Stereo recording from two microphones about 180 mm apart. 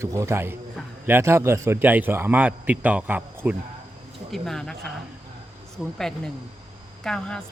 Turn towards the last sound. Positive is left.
turn(degrees=5)  # may be behind; listen again after turning